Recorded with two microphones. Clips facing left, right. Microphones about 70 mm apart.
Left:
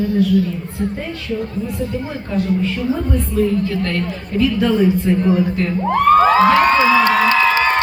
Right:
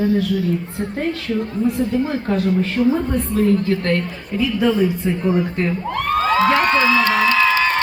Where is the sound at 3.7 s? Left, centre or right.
Right.